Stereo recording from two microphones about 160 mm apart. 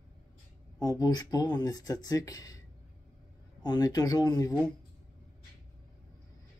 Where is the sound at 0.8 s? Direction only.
25° left (ahead or behind).